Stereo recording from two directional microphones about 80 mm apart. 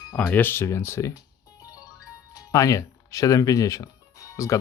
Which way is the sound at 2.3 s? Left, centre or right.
Left.